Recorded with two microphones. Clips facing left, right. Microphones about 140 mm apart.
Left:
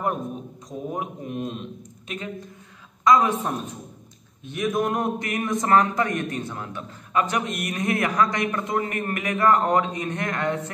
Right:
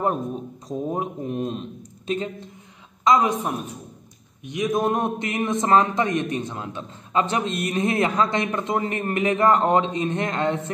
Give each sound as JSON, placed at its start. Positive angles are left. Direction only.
{"t": 0.7, "sound": "a man's voice", "side_deg": -30}
{"t": 3.0, "sound": "a woman's voice", "side_deg": -20}
{"t": 4.5, "sound": "a man's voice", "side_deg": -20}